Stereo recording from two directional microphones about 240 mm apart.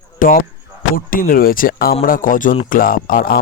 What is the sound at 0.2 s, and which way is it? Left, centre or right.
Speech, left.